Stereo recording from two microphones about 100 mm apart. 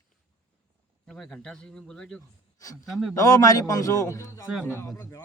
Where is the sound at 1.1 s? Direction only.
5° left (ahead or behind).